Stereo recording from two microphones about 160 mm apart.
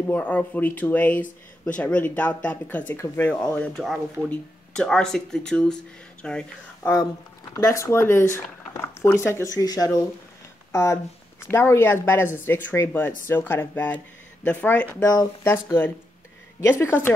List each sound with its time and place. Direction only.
0.0 s speech: 10° left (ahead or behind)
7.5 s speech: 20° left (ahead or behind)